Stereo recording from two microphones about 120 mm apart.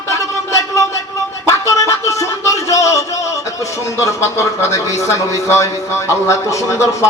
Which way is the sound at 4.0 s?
25° left (ahead or behind).